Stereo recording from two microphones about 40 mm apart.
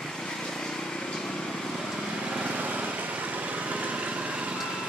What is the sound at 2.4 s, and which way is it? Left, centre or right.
Lawn mower, right.